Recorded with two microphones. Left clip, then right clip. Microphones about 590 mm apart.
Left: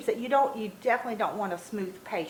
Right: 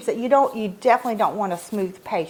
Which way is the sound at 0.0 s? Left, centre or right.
Right.